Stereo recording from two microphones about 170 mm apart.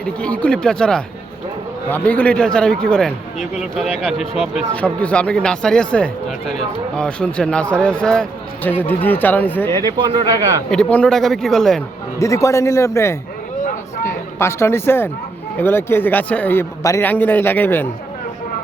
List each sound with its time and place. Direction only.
0.0 s a man's voice: 5° left (ahead or behind)
9.8 s speech: 30° right (ahead or behind)
10.7 s a man's voice: 5° left (ahead or behind)
12.2 s a man's voice: 20° left (ahead or behind)